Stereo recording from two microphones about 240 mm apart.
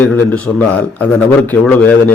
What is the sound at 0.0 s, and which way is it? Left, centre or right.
A man's voice, centre.